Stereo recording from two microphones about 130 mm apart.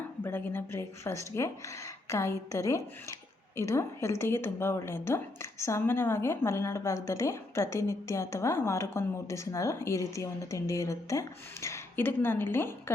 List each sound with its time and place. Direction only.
0.2 s speech: 15° left (ahead or behind)